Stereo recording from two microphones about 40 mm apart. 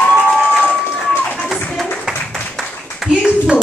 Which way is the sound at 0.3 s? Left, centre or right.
Centre.